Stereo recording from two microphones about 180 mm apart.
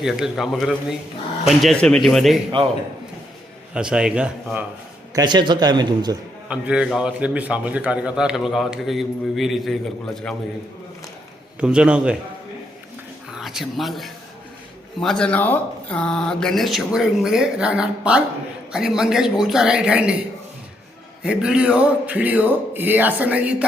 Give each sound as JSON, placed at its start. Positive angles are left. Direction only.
{"t": 0.0, "sound": "a man's voice", "side_deg": 0}
{"t": 3.8, "sound": "a man's voice", "side_deg": -5}
{"t": 5.1, "sound": "a man's voice", "side_deg": -25}
{"t": 6.5, "sound": "a man's voice", "side_deg": -5}
{"t": 11.6, "sound": "a man's voice", "side_deg": -5}
{"t": 13.3, "sound": "a man's voice", "side_deg": 0}
{"t": 21.2, "sound": "speech", "side_deg": -5}